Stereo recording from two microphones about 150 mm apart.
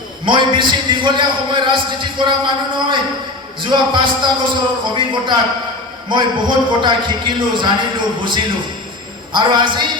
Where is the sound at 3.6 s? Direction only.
35° right (ahead or behind).